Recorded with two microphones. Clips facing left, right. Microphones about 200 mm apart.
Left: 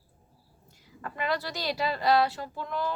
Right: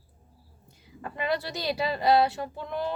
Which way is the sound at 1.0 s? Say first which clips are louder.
Right 1 dB; 20° right (ahead or behind).